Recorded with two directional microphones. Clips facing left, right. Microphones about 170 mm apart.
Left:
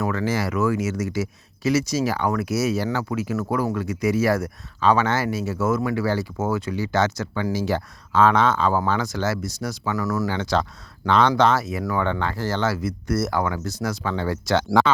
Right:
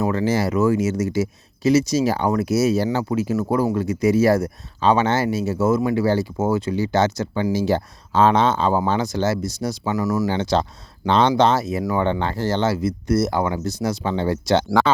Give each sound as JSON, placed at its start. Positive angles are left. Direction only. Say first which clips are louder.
{"t": 0.0, "sound": "speech", "louder": "right 4 dB", "side_deg": -25}